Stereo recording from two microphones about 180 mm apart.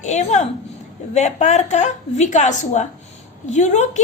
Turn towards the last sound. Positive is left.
turn(degrees=40)  # may be behind; listen again after turning